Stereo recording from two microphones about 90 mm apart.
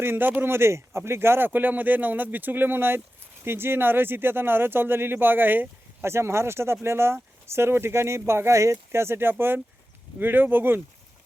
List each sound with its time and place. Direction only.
0.0 s speech: 25° right (ahead or behind)